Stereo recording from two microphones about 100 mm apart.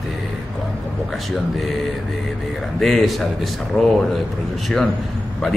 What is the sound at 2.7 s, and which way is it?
Speech, 5° left (ahead or behind).